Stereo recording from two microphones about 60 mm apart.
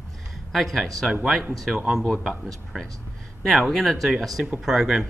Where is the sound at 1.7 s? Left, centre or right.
Centre.